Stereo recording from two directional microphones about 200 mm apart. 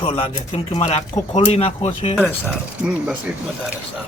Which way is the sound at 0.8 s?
30° left (ahead or behind).